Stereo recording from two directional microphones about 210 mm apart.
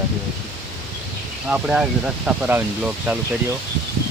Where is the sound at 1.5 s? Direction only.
5° right (ahead or behind).